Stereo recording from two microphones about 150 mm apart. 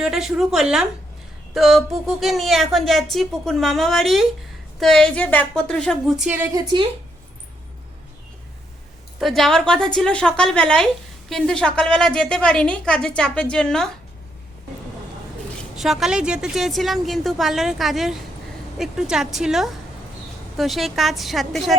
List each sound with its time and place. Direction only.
0.0 s speech: 5° right (ahead or behind)
6.5 s a woman's voice: 25° right (ahead or behind)
9.1 s speech: centre (ahead or behind)
15.8 s speech: centre (ahead or behind)